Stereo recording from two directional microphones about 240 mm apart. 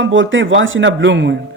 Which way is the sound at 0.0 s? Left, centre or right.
Right.